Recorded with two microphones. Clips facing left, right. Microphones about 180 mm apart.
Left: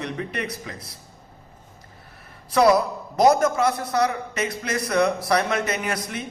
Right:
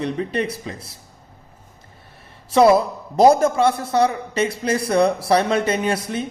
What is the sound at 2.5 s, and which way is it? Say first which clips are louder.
A man's voice: right 4 dB; 25° right (ahead or behind).